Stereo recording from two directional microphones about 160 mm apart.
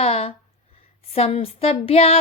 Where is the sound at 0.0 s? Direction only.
40° left (ahead or behind).